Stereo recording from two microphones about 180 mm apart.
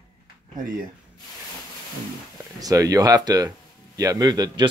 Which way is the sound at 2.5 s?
20° right (ahead or behind).